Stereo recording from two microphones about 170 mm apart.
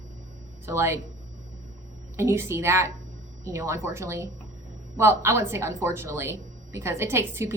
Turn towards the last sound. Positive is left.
turn(degrees=-15)  # may be behind; listen again after turning